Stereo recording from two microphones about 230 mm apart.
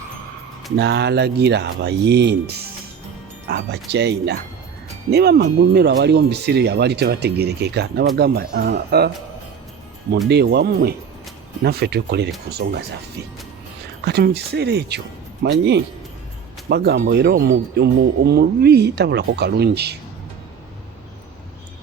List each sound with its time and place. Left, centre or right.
0.8 s speech: right
3.4 s speech: right
10.2 s speech: right
14.0 s speech: right